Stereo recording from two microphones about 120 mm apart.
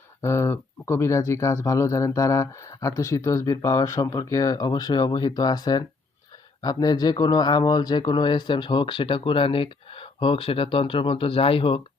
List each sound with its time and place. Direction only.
0.2 s speech: 20° left (ahead or behind); by 11.8 s 50° left (ahead or behind)